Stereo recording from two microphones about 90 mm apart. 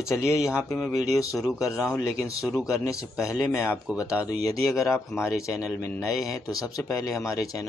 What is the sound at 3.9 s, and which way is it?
Speech, 20° right (ahead or behind).